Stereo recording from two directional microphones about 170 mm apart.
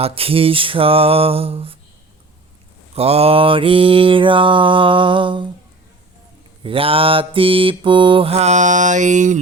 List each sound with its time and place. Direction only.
0.0 s mantra: 35° right (ahead or behind)
2.9 s mantra: 35° right (ahead or behind)
6.6 s mantra: 30° right (ahead or behind)